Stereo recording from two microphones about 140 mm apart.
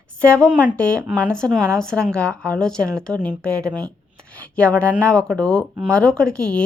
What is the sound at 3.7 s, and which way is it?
Speech, 30° right (ahead or behind).